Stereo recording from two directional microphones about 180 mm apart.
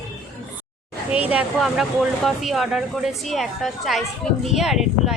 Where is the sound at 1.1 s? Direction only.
5° right (ahead or behind).